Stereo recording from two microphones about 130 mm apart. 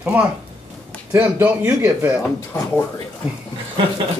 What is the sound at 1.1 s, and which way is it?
Speech, 15° right (ahead or behind).